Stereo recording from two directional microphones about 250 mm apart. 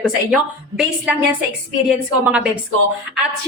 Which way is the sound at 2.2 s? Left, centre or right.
Centre.